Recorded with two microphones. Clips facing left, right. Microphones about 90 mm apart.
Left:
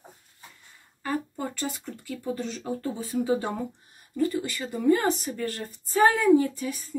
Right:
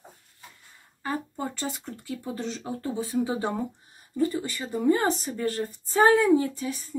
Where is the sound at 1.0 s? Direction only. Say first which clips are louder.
Left 1 dB; 25° right (ahead or behind).